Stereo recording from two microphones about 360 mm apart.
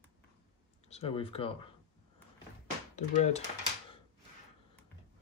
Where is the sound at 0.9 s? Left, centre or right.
Centre.